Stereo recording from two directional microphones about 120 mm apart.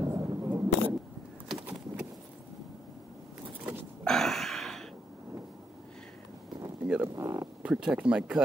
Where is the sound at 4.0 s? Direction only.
5° left (ahead or behind).